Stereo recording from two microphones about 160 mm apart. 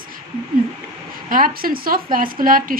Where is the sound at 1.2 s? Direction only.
60° right (ahead or behind).